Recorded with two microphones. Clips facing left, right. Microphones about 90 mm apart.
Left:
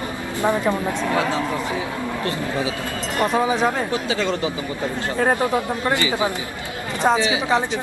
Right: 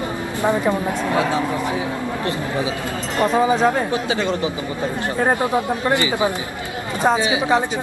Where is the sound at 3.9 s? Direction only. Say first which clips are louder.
Right 1 dB; 20° right (ahead or behind).